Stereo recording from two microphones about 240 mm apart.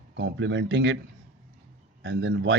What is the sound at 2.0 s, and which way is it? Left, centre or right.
Speech, right.